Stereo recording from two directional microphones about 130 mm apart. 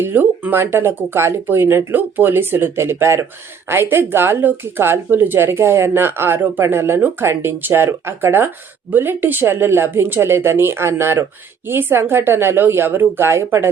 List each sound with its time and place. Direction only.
0.0 s speech: 15° right (ahead or behind)